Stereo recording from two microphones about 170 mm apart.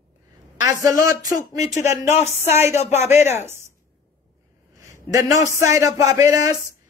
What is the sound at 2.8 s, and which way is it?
Speech, 40° left (ahead or behind).